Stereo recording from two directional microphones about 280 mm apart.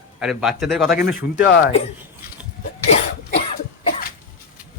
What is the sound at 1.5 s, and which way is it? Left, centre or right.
Speech, left.